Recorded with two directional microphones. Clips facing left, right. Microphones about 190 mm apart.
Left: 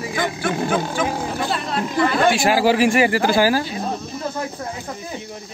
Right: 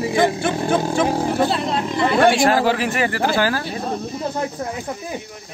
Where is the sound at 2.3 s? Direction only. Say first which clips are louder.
Even; 10° left (ahead or behind).